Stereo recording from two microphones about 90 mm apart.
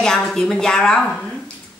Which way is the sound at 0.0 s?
5° left (ahead or behind).